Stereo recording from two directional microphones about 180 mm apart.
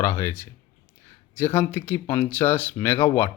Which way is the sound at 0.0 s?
15° left (ahead or behind).